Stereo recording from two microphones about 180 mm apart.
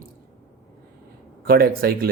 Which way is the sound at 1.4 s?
55° right (ahead or behind).